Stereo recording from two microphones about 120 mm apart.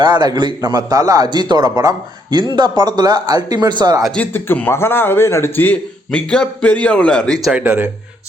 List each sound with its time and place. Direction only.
0.0 s a man's voice: 35° right (ahead or behind)
4.0 s speech: 5° left (ahead or behind)
4.3 s a man's voice: 15° left (ahead or behind)
7.5 s speech: 15° right (ahead or behind)